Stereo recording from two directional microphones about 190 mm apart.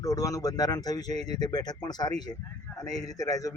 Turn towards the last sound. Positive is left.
turn(degrees=20)  # may be behind; listen again after turning